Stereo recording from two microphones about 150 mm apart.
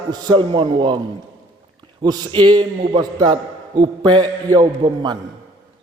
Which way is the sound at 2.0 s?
25° right (ahead or behind).